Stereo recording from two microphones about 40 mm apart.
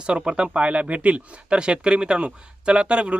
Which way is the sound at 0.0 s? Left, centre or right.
Right.